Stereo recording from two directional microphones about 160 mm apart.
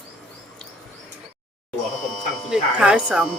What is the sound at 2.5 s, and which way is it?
Speech, 5° right (ahead or behind).